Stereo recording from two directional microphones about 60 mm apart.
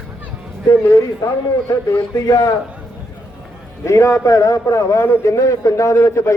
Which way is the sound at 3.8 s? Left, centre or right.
Left.